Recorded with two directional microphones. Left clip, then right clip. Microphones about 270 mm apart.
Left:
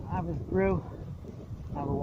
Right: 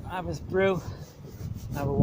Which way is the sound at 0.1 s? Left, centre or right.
Centre.